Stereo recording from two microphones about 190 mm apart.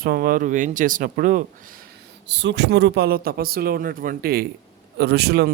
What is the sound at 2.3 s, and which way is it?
Speech, 65° right (ahead or behind).